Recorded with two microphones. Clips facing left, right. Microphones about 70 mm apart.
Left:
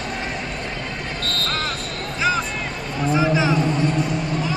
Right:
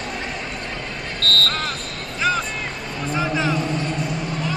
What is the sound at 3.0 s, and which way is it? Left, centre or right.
Music, centre.